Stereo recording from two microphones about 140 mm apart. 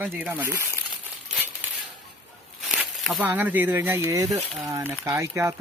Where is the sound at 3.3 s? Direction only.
10° right (ahead or behind).